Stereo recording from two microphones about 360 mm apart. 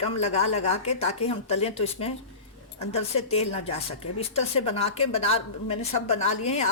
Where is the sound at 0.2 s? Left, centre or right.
Centre.